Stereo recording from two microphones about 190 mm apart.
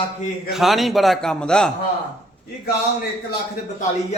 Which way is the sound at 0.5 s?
Centre (ahead or behind).